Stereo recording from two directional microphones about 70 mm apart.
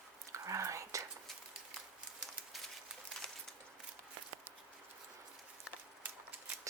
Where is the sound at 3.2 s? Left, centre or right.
Centre.